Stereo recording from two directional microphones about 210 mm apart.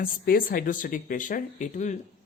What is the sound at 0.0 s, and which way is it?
Speech, 40° left (ahead or behind).